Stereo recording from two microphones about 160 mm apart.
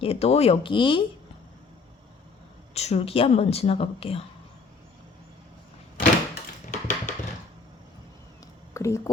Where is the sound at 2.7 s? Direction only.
40° left (ahead or behind).